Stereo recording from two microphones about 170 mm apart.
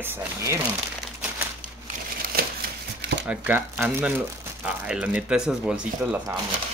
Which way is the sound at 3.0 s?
90° right.